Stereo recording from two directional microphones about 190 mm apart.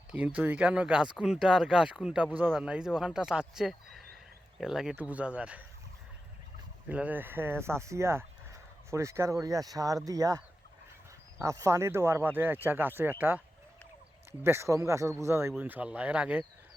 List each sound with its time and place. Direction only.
0.1 s speech: 5° right (ahead or behind)
6.8 s speech: 10° right (ahead or behind)
14.4 s speech: 15° right (ahead or behind)